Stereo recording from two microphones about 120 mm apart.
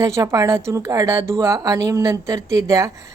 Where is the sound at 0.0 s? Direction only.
25° right (ahead or behind).